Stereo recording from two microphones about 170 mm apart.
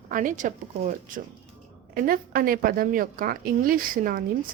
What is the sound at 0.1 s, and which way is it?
A woman's voice, 50° right (ahead or behind).